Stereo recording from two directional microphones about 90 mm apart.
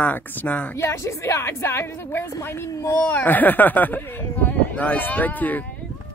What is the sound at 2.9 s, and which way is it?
Speech, 20° left (ahead or behind).